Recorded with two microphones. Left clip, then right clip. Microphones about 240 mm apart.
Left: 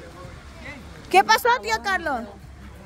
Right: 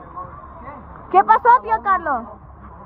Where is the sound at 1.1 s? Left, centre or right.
Centre.